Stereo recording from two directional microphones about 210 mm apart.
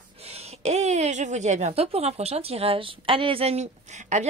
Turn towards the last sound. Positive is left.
turn(degrees=-35)  # may be behind; listen again after turning